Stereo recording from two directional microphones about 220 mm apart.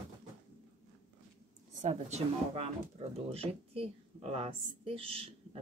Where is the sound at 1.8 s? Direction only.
30° right (ahead or behind).